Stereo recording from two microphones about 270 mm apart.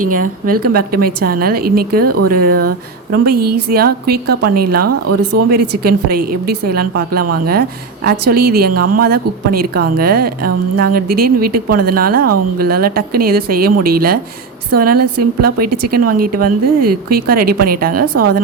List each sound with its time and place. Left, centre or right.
0.0 s speech: right
0.4 s speech: right
2.0 s speech: right
2.3 s speech: right
4.9 s speech: right
5.5 s speech: right
8.3 s speech: right